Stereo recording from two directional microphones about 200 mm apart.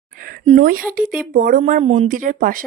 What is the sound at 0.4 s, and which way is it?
Speech, 40° right (ahead or behind).